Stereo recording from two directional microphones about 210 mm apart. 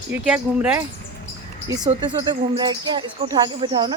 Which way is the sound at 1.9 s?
20° right (ahead or behind).